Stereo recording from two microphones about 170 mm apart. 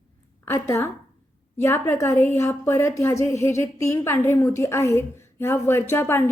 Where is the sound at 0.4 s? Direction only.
15° left (ahead or behind).